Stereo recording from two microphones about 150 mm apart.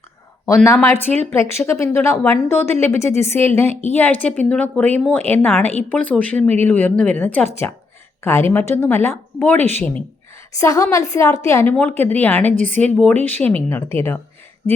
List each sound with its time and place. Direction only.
0.4 s a woman's voice: 20° left (ahead or behind)
9.6 s speech: 45° right (ahead or behind)
10.6 s a woman's voice: 20° left (ahead or behind)